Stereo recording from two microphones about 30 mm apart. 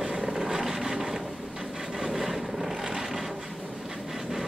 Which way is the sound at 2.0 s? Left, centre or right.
Centre.